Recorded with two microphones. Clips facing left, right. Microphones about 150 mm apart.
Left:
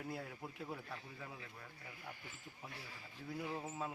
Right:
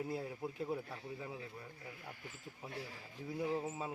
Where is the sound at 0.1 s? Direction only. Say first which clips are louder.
Right 5 dB; 20° right (ahead or behind).